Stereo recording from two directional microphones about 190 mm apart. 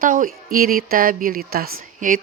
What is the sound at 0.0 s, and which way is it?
A woman's voice, 45° right (ahead or behind).